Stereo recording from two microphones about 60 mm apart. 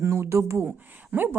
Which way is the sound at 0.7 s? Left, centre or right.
Right.